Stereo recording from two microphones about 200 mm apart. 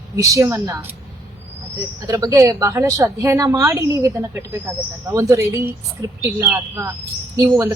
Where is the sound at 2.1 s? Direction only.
15° right (ahead or behind).